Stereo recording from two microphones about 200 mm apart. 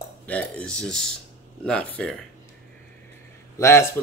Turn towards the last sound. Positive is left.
turn(degrees=15)  # may be behind; listen again after turning